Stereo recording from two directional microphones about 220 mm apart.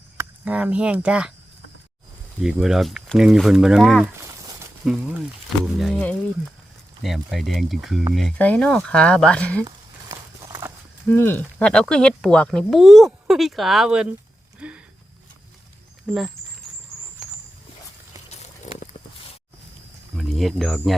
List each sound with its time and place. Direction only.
0.2 s speech: 5° right (ahead or behind)
2.4 s speech: 5° right (ahead or behind)
4.1 s a sound: 15° right (ahead or behind)
5.7 s speech: centre (ahead or behind)
9.6 s a sound: 15° right (ahead or behind)
11.1 s speech: 10° left (ahead or behind)
14.6 s a sound: 5° right (ahead or behind)
16.1 s speech: 5° right (ahead or behind)
18.3 s pour: 30° left (ahead or behind)
20.1 s speech: centre (ahead or behind)